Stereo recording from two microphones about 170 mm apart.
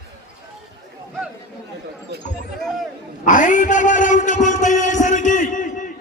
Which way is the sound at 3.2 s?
50° left (ahead or behind).